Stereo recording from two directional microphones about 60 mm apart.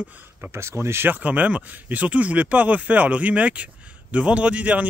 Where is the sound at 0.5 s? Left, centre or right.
Right.